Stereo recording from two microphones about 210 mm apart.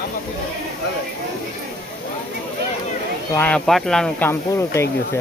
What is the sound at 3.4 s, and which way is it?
Speech, 5° left (ahead or behind).